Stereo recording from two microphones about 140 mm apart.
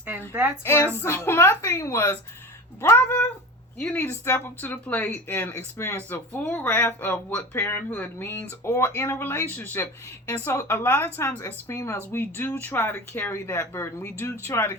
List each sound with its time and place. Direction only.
0.6 s a woman's voice: 15° left (ahead or behind)